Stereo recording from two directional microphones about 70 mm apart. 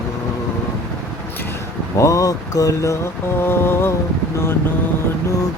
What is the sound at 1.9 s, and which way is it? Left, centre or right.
Speech, left.